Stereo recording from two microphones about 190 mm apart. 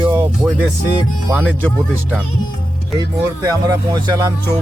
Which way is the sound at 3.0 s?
20° right (ahead or behind).